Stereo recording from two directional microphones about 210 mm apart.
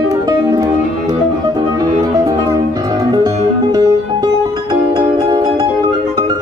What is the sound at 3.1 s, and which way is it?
Music, 20° right (ahead or behind).